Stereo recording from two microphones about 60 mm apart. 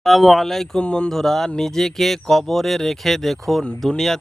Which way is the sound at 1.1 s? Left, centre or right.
Centre.